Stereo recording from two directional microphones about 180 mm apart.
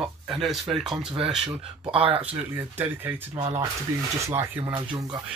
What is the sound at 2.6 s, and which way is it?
Speech, 10° right (ahead or behind).